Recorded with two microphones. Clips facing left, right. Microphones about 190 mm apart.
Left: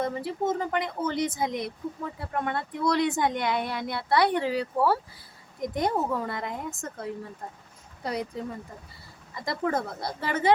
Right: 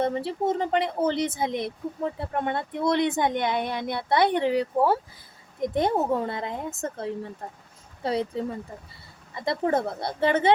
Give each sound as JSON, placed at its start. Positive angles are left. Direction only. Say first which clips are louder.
{"t": 0.0, "sound": "speech", "louder": "right 3 dB", "side_deg": -25}
{"t": 9.3, "sound": "speech", "louder": "right 4 dB", "side_deg": -25}